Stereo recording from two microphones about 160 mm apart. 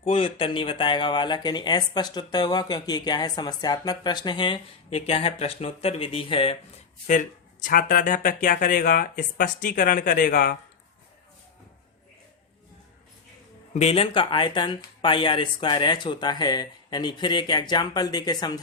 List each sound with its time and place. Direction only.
0.0 s speech: 35° left (ahead or behind)
7.1 s speech: 55° left (ahead or behind)
13.7 s speech: 40° left (ahead or behind)